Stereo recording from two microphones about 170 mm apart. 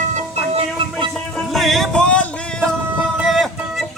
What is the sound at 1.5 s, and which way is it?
Music, centre (ahead or behind).